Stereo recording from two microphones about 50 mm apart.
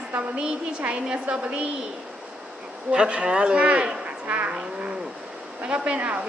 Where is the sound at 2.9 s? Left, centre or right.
Centre.